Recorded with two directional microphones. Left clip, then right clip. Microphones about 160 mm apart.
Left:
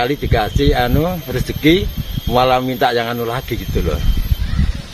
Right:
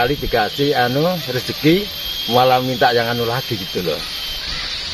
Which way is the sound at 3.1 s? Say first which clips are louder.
Right 1 dB; 25° left (ahead or behind).